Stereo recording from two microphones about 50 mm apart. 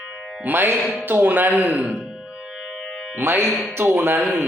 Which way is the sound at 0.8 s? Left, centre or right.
Left.